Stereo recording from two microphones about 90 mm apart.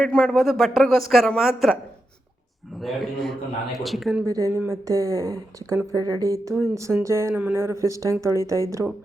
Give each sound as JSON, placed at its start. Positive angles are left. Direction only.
{"t": 0.0, "sound": "a man's voice", "side_deg": 10}
{"t": 2.8, "sound": "a man's voice", "side_deg": 0}
{"t": 4.3, "sound": "speech", "side_deg": -40}